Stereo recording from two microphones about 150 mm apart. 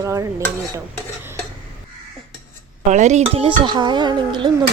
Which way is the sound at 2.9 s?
50° right (ahead or behind).